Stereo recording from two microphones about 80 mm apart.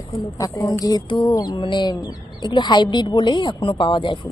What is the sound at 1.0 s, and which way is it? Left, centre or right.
Speech, left.